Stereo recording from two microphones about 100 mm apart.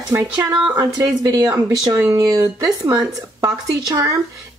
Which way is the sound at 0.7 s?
40° right (ahead or behind).